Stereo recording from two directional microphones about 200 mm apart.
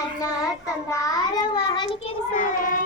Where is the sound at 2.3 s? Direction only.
40° left (ahead or behind).